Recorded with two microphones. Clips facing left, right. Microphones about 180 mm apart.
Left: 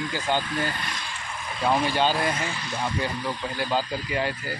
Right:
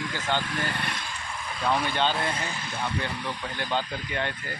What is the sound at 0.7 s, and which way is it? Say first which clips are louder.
Speech: right 2 dB; 60° right (ahead or behind).